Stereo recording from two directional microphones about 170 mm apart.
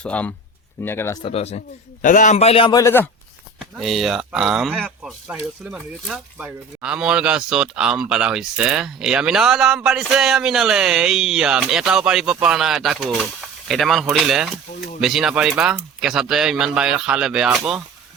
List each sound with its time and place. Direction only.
0.0 s speech: 10° left (ahead or behind)
1.2 s a man's voice: 35° left (ahead or behind)
2.7 s speech: 15° left (ahead or behind)
3.6 s speech: centre (ahead or behind)